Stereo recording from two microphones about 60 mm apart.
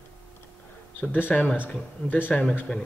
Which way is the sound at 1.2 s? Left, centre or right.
Left.